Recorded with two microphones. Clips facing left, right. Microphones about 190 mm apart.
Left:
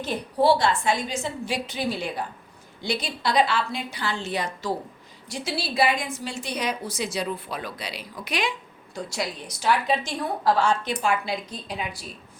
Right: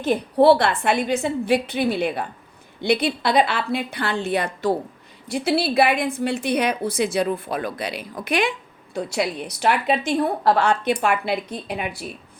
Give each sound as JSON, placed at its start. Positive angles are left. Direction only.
{"t": 0.0, "sound": "a woman's voice", "side_deg": -60}